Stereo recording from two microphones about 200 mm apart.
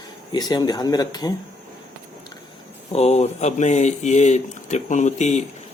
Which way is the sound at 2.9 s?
30° left (ahead or behind).